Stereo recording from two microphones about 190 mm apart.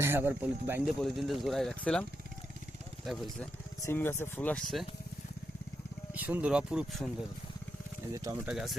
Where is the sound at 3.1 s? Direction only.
Centre (ahead or behind).